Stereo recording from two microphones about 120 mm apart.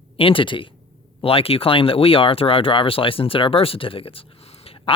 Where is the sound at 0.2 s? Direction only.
50° left (ahead or behind).